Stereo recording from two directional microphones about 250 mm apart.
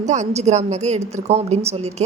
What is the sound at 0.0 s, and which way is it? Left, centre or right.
A woman's voice, right.